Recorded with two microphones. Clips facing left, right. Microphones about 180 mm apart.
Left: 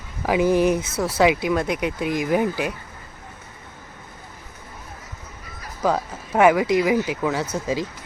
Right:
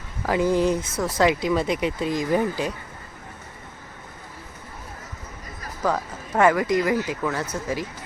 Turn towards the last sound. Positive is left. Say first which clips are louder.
# left 3 dB
turn(degrees=10)  # may be behind; listen again after turning